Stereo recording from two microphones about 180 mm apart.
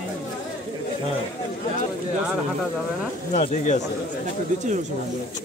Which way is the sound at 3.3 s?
40° left (ahead or behind).